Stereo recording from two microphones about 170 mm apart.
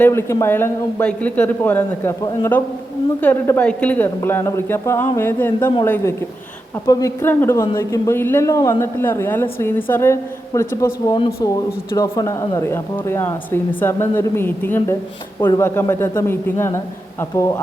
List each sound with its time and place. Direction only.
0.0 s speech: 15° left (ahead or behind)